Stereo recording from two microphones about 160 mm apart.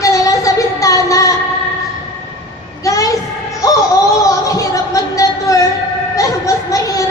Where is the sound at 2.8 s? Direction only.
20° left (ahead or behind).